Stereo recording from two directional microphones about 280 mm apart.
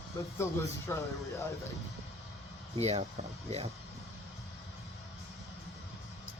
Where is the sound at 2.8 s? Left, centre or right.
Right.